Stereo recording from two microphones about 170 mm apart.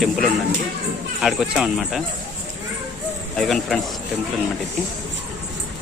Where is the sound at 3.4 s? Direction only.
Centre (ahead or behind).